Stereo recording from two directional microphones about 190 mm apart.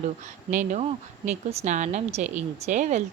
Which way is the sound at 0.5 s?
40° right (ahead or behind).